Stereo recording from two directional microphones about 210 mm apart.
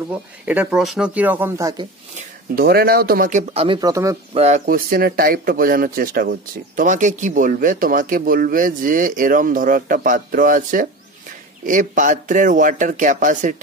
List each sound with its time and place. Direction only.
0.5 s speech: 5° right (ahead or behind)
2.1 s speech: 45° right (ahead or behind); by 4.2 s 15° right (ahead or behind)
4.3 s speech: 30° right (ahead or behind)